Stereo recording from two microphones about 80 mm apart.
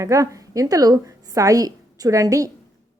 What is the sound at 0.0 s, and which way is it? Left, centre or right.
Speech, right.